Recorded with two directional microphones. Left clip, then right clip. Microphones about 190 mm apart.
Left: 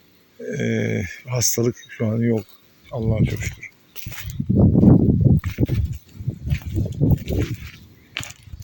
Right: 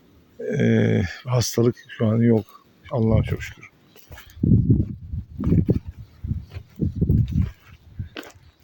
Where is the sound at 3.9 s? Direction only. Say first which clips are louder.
Left 9 dB; centre (ahead or behind).